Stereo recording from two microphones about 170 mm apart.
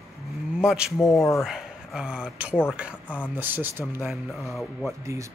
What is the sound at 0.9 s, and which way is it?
Speech, 15° left (ahead or behind).